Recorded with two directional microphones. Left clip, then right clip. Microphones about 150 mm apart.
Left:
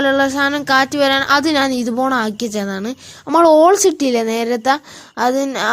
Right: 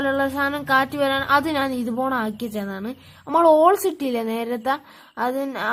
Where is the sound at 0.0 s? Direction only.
30° left (ahead or behind).